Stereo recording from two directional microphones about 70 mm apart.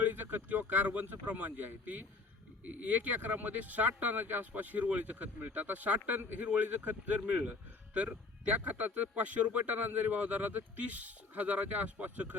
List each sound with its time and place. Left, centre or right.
0.0 s speech: right